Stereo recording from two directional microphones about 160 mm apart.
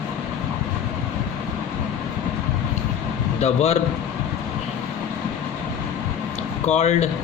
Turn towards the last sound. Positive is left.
turn(degrees=40)  # may be behind; listen again after turning